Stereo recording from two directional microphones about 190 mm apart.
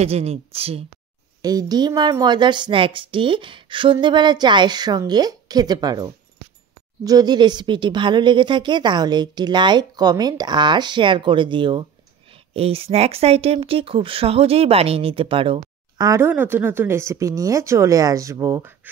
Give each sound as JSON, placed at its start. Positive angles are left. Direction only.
{"t": 0.0, "sound": "speech", "side_deg": -35}
{"t": 1.4, "sound": "a woman's voice", "side_deg": -20}
{"t": 16.1, "sound": "speech", "side_deg": -10}